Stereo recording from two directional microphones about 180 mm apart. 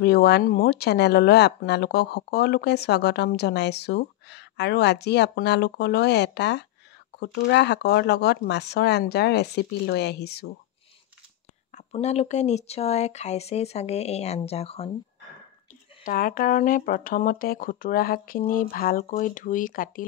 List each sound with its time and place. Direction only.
0.0 s speech: 60° left (ahead or behind)
11.7 s speech: 40° left (ahead or behind)
16.0 s speech: 50° left (ahead or behind)